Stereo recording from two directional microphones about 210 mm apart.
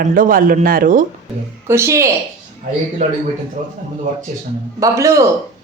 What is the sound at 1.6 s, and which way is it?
Speech, 10° right (ahead or behind).